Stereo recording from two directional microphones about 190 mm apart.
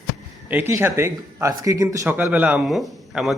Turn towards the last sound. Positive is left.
turn(degrees=0)  # may be behind; listen again after turning